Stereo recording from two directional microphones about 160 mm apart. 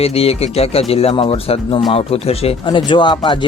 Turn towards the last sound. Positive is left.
turn(degrees=30)  # may be behind; listen again after turning